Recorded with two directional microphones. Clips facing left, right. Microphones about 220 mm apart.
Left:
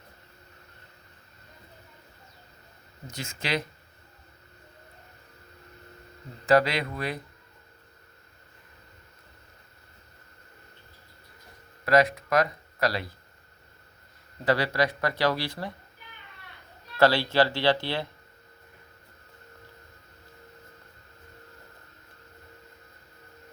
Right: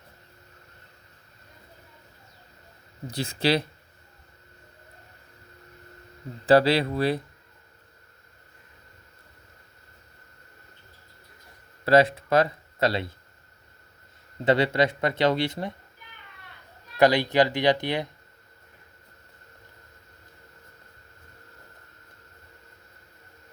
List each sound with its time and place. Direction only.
3.1 s speech: 35° right (ahead or behind)
6.4 s speech: 30° right (ahead or behind)
11.9 s speech: 30° right (ahead or behind)
14.4 s speech: 25° right (ahead or behind)
17.0 s speech: 15° right (ahead or behind)